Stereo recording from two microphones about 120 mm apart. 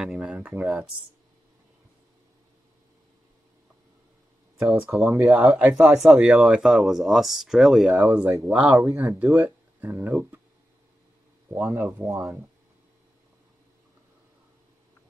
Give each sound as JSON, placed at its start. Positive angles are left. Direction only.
{"t": 0.0, "sound": "speech", "side_deg": -5}
{"t": 4.6, "sound": "speech", "side_deg": -10}
{"t": 11.5, "sound": "speech", "side_deg": -20}